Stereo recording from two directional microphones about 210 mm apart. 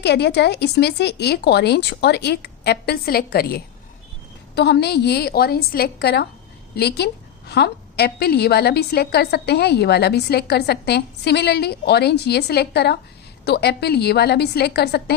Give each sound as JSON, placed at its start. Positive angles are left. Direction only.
{"t": 0.0, "sound": "a woman's voice", "side_deg": 55}